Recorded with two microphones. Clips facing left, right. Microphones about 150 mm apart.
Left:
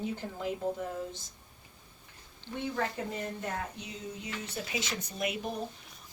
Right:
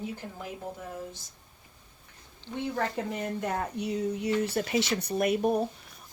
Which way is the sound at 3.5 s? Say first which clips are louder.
Right 8 dB; 60° right (ahead or behind).